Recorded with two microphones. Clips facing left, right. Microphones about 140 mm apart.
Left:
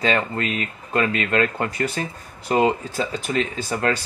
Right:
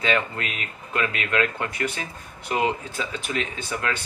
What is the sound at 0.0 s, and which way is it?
Speech, 35° left (ahead or behind).